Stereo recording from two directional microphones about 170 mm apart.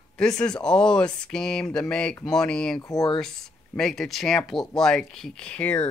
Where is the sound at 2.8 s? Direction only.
20° left (ahead or behind).